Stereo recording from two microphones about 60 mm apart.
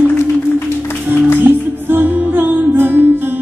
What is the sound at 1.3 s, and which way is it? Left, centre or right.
Music, right.